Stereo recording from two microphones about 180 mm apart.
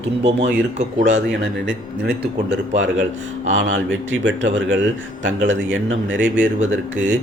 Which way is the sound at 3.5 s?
90° right.